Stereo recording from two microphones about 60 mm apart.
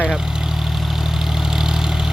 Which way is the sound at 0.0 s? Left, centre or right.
Centre.